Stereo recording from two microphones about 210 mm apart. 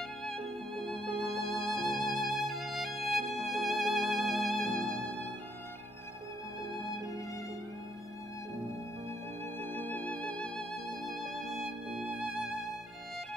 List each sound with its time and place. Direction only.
0.2 s music: centre (ahead or behind)
6.6 s music: 15° left (ahead or behind)
9.6 s music: 10° left (ahead or behind)